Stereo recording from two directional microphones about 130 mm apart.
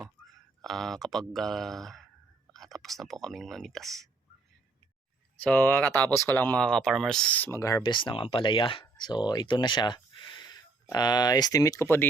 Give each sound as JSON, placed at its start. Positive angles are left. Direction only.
{"t": 0.6, "sound": "speech", "side_deg": 0}
{"t": 5.4, "sound": "speech", "side_deg": 10}
{"t": 7.8, "sound": "speech", "side_deg": 40}